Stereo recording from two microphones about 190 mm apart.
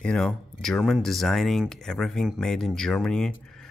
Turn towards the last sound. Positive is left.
turn(degrees=5)  # may be behind; listen again after turning